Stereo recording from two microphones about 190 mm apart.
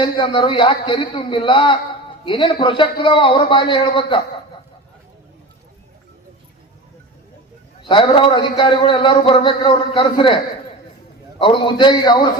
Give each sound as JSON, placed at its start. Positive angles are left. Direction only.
{"t": 0.0, "sound": "a man's voice", "side_deg": 25}
{"t": 7.8, "sound": "a man's voice", "side_deg": 25}